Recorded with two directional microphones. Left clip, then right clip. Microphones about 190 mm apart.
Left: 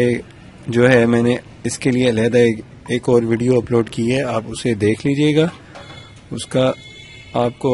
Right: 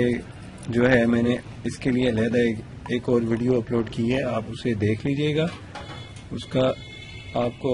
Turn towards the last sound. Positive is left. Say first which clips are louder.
# left 7 dB
turn(degrees=50)  # may be behind; listen again after turning